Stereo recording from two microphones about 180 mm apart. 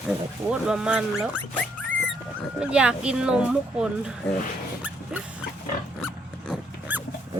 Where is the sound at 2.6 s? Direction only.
5° right (ahead or behind).